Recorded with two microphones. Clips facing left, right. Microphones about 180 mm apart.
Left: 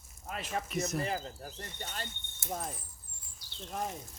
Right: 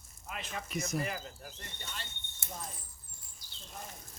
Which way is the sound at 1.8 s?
50° left (ahead or behind).